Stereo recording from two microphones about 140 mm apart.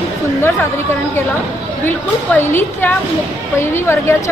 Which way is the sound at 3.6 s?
20° left (ahead or behind).